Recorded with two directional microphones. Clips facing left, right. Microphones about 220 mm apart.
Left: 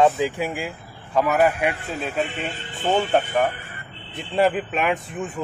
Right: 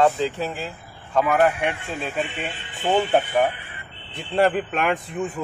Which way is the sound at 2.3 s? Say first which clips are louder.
Left 2 dB; 40° left (ahead or behind).